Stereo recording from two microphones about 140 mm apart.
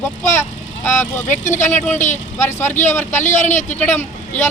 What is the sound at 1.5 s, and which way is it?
Speech, 60° left (ahead or behind).